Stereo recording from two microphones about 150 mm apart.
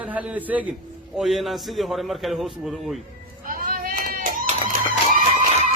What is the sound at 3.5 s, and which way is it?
Children playing, 70° right (ahead or behind).